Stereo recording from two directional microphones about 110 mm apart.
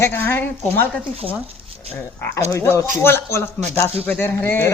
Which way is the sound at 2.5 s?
25° left (ahead or behind).